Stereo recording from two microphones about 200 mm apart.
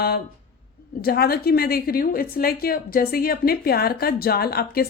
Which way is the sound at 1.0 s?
50° left (ahead or behind).